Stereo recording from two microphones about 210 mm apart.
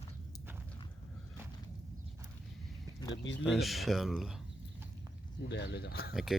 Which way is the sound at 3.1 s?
60° left (ahead or behind).